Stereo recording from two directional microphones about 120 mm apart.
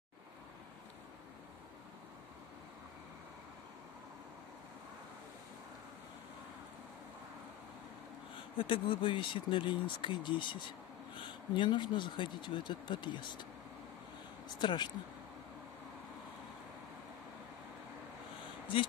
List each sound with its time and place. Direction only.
8.5 s speech: 45° left (ahead or behind)
14.6 s speech: 40° left (ahead or behind)